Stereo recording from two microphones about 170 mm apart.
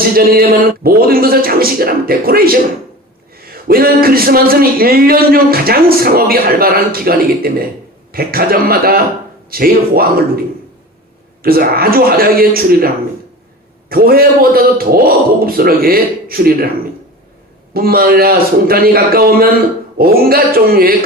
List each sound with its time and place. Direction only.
0.3 s speech: 60° right (ahead or behind)
11.4 s speech: 60° right (ahead or behind)
13.9 s speech: 60° right (ahead or behind)
17.7 s speech: 60° right (ahead or behind)